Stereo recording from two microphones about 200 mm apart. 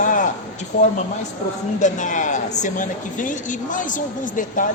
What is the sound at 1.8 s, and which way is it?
A woman's voice, 40° left (ahead or behind).